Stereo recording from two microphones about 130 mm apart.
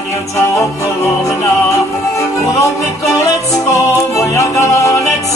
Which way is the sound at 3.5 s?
25° left (ahead or behind).